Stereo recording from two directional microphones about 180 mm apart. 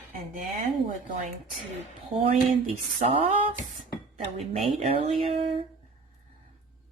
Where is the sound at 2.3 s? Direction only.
35° right (ahead or behind).